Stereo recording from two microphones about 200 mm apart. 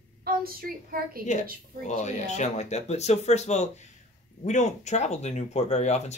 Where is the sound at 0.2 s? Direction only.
50° right (ahead or behind).